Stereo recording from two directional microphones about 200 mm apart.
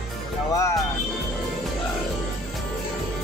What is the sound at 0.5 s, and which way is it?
Speech, 15° left (ahead or behind).